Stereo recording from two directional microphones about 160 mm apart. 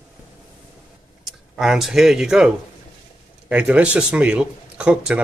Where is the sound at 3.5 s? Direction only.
10° right (ahead or behind).